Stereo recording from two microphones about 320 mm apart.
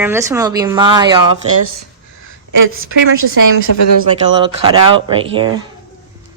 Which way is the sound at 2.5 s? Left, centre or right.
Right.